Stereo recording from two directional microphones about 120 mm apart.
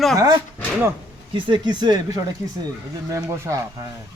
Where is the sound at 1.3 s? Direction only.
45° right (ahead or behind).